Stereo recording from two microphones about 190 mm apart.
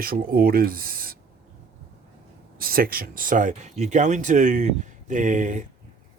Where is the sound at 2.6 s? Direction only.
50° right (ahead or behind).